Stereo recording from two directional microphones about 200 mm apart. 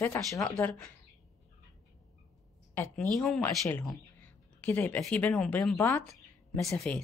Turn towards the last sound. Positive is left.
turn(degrees=5)  # may be behind; listen again after turning